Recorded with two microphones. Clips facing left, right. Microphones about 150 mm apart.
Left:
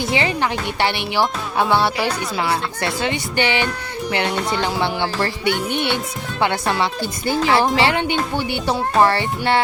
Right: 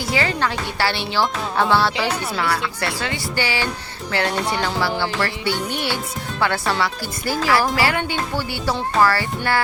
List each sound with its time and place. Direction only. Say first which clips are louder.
0.0 s speech: left 2 dB; 20° left (ahead or behind)